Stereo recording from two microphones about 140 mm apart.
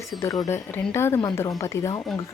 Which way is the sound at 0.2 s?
20° left (ahead or behind).